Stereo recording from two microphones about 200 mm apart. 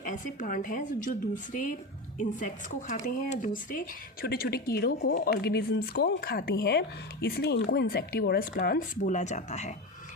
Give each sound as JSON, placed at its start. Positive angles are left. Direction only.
{"t": 0.0, "sound": "a woman's voice", "side_deg": 40}
{"t": 2.1, "sound": "a woman's voice", "side_deg": 40}